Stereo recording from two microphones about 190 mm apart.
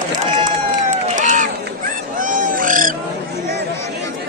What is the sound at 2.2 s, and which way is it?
Oink, 45° right (ahead or behind).